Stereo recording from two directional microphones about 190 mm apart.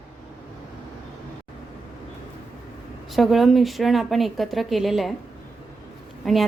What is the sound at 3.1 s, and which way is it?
A woman's voice, centre (ahead or behind).